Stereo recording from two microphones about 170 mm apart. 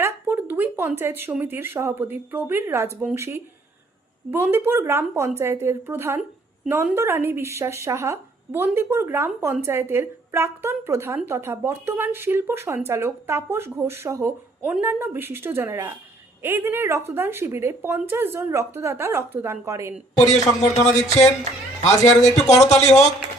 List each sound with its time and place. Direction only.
0.0 s speech: 15° right (ahead or behind)
20.3 s speech: 40° left (ahead or behind)